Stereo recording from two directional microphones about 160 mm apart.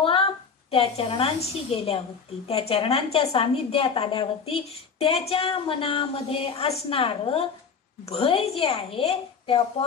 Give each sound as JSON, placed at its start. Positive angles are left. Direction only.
{"t": 0.0, "sound": "a woman's voice", "side_deg": 35}